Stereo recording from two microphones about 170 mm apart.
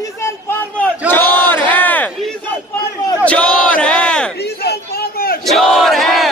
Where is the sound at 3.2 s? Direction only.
5° left (ahead or behind).